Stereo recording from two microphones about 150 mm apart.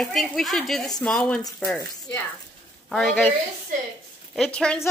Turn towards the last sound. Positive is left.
turn(degrees=5)  # may be behind; listen again after turning